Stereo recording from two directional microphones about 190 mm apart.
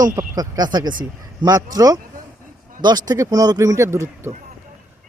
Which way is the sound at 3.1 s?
20° right (ahead or behind).